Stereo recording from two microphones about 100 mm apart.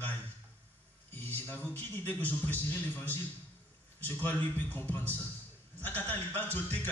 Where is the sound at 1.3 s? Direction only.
15° left (ahead or behind).